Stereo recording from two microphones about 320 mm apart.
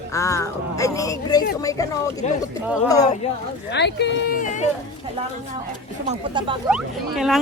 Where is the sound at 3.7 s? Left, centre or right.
Left.